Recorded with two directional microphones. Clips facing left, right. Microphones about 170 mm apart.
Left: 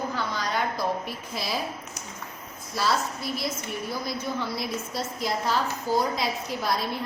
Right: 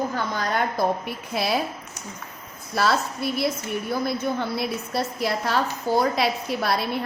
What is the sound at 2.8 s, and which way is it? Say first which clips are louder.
A woman's voice: right 4 dB; 60° right (ahead or behind).